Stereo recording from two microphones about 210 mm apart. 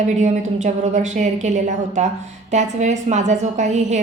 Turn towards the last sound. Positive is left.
turn(degrees=-35)  # may be behind; listen again after turning